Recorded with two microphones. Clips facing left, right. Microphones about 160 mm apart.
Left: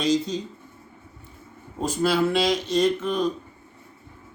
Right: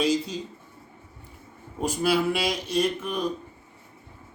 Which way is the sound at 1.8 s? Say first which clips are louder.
Left 2 dB; 10° right (ahead or behind).